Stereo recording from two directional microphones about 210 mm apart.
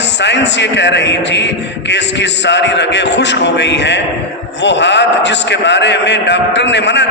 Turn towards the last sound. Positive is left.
turn(degrees=55)  # may be behind; listen again after turning